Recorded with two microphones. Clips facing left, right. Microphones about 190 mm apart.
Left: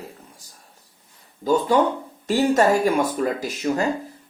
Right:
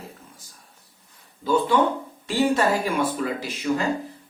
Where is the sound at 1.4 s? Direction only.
40° left (ahead or behind).